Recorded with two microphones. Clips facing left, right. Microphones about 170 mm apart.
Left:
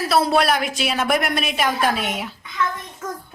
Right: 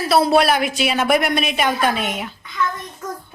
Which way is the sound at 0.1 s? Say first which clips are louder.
Right 3 dB; centre (ahead or behind).